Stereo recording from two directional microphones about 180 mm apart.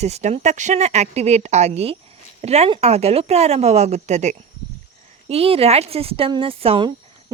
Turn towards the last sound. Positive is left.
turn(degrees=-30)  # may be behind; listen again after turning